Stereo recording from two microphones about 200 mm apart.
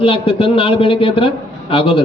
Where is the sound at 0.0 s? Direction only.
30° left (ahead or behind).